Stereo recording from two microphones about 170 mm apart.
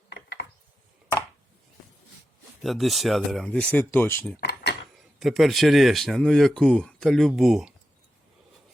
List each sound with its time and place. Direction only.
0.1 s gears: 80° left
2.6 s speech: centre (ahead or behind)
4.4 s a sound: 80° left
5.2 s speech: centre (ahead or behind)